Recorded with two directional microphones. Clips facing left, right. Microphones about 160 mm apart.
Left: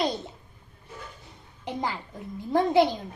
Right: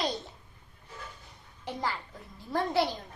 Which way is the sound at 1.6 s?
20° left (ahead or behind).